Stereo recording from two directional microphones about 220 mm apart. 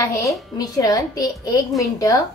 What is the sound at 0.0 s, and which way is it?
A woman's voice, 15° left (ahead or behind).